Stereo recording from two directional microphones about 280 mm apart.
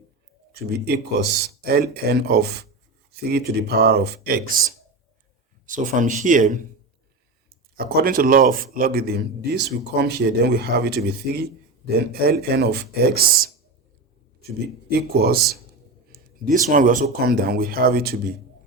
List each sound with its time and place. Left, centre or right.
0.5 s speech: right
5.6 s speech: right
7.8 s speech: right
14.8 s speech: right